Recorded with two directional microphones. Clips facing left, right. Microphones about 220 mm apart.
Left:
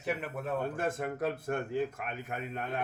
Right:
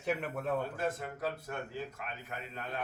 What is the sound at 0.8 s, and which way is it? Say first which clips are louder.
Speech: left 3 dB; 50° left (ahead or behind).